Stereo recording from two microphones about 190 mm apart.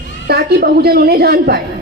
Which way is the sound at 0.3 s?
55° right (ahead or behind).